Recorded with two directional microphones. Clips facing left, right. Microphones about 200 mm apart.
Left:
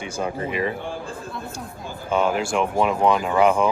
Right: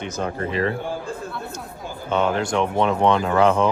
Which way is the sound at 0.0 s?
10° left (ahead or behind).